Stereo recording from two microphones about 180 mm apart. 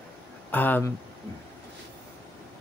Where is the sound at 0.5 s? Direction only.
10° left (ahead or behind).